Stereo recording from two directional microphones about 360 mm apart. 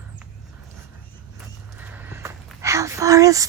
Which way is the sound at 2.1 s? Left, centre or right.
Centre.